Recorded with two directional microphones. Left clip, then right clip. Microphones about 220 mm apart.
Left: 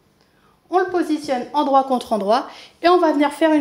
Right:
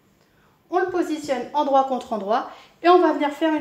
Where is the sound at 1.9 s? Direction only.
45° left (ahead or behind).